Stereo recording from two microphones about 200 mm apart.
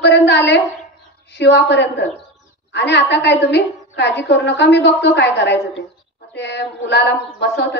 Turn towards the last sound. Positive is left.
turn(degrees=60)  # may be behind; listen again after turning